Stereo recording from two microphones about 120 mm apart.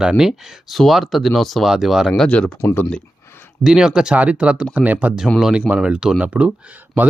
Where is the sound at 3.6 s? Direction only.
5° right (ahead or behind).